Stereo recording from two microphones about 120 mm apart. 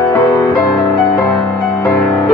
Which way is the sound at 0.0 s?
35° left (ahead or behind).